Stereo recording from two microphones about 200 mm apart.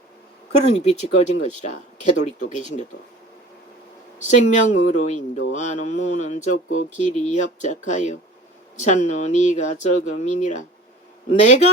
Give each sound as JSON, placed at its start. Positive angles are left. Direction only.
{"t": 0.6, "sound": "speech", "side_deg": 35}
{"t": 4.2, "sound": "speech", "side_deg": 35}